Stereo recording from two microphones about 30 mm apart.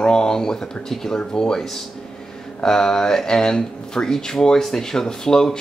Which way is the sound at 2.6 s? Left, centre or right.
Centre.